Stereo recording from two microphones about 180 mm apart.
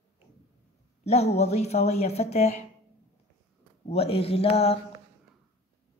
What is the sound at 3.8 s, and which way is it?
Speech, 35° left (ahead or behind).